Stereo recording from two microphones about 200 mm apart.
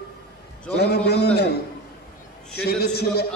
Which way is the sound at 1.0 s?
55° left (ahead or behind).